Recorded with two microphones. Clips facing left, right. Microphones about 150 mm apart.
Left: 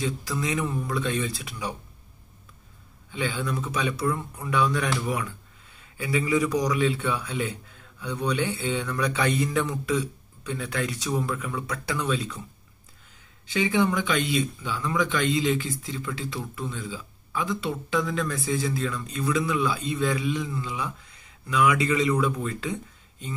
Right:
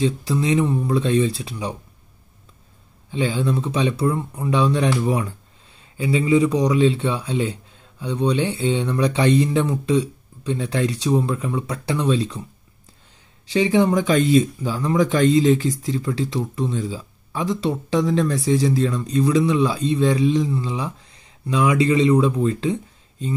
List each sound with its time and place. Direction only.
0.0 s a man's voice: 30° right (ahead or behind)
3.1 s a man's voice: 30° right (ahead or behind)
13.5 s speech: 35° right (ahead or behind)